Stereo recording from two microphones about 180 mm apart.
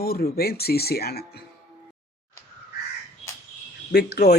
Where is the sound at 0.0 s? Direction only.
60° left (ahead or behind).